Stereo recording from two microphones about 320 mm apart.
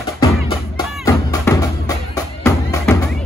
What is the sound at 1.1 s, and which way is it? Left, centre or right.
Music, centre.